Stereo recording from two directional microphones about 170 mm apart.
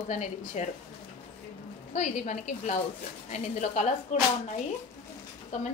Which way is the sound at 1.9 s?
45° left (ahead or behind).